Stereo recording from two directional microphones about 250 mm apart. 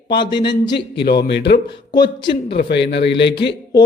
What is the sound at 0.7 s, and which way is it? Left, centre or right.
Speech, left.